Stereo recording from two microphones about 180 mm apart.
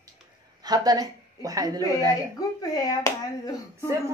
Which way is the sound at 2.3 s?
20° left (ahead or behind).